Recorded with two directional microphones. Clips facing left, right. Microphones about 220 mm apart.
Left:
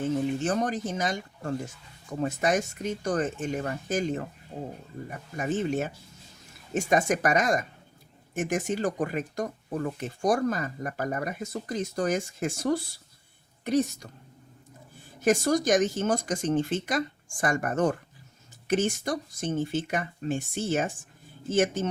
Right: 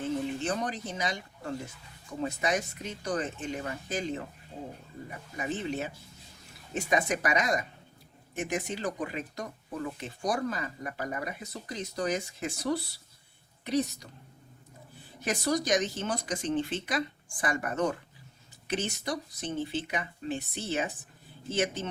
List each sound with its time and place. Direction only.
0.4 s speech: 45° left (ahead or behind)
5.4 s speech: 45° left (ahead or behind)
15.2 s speech: 45° left (ahead or behind)